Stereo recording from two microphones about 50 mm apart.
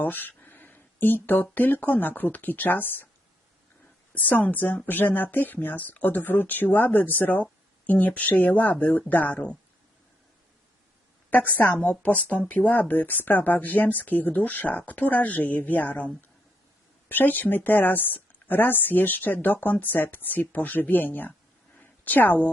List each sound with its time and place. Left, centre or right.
0.0 s a sound: left
1.5 s speech: left
4.1 s speech: left
11.3 s speech: left
11.8 s speech: left
21.8 s a sound: left